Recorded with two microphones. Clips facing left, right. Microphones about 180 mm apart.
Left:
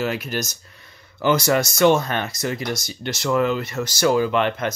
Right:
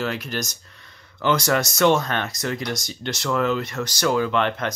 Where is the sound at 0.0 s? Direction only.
10° left (ahead or behind).